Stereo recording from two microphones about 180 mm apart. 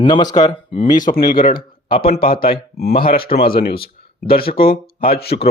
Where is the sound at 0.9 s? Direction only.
50° left (ahead or behind).